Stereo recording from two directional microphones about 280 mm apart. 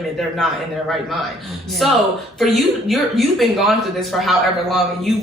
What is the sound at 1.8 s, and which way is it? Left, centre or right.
A man's voice, centre.